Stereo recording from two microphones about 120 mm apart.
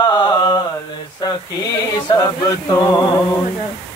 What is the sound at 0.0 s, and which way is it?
Mantra, 35° left (ahead or behind).